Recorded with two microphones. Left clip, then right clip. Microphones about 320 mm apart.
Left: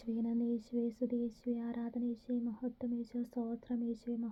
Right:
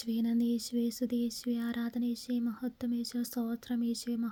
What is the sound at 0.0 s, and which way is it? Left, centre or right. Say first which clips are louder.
Speech: right 5 dB; right.